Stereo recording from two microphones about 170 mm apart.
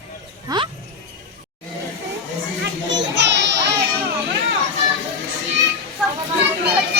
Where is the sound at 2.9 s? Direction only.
90° right.